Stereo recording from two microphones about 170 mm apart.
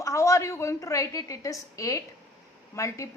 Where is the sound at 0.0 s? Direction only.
20° left (ahead or behind).